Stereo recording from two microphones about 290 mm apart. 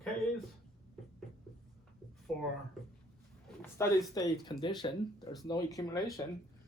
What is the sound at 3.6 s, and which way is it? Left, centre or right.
Speech, centre.